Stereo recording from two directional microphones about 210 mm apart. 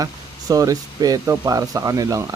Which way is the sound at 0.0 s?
15° right (ahead or behind).